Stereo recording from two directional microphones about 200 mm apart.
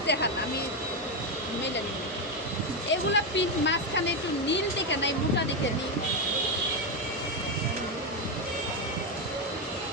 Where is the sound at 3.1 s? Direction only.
65° left (ahead or behind).